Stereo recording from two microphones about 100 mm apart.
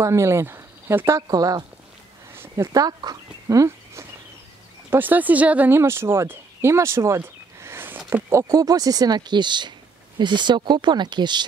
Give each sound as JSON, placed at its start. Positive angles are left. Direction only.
{"t": 0.0, "sound": "speech", "side_deg": -30}
{"t": 1.3, "sound": "speech", "side_deg": -40}
{"t": 2.3, "sound": "a sound", "side_deg": -25}
{"t": 4.9, "sound": "speech", "side_deg": -20}
{"t": 5.8, "sound": "speech", "side_deg": -25}